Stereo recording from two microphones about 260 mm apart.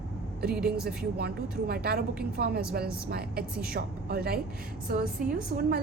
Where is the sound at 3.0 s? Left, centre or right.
Right.